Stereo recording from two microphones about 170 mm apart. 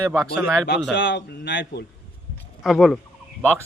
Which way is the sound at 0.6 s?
90° left.